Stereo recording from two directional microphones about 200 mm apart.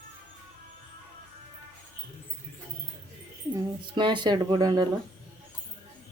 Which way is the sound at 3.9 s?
25° right (ahead or behind).